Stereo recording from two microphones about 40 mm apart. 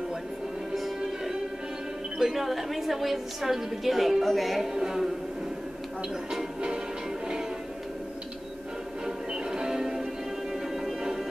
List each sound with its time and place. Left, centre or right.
0.7 s music: centre
2.1 s a woman's voice: centre
4.7 s speech: centre
9.0 s music: centre